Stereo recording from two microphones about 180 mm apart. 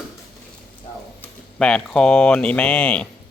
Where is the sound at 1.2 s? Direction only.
5° left (ahead or behind).